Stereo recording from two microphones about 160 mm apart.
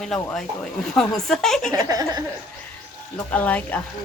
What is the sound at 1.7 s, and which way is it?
Laughter, 20° right (ahead or behind).